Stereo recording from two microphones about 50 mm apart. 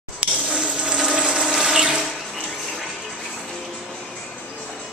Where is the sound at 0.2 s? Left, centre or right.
Right.